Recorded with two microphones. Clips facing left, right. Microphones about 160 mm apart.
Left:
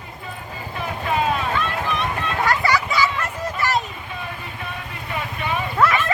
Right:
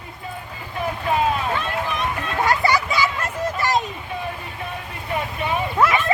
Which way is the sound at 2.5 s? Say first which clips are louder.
Right 1 dB; 20° right (ahead or behind).